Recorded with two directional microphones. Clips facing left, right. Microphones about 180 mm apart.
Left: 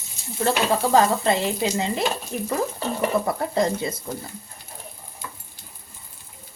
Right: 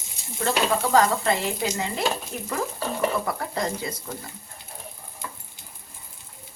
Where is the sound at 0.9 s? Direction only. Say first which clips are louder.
Left 2 dB; 25° left (ahead or behind).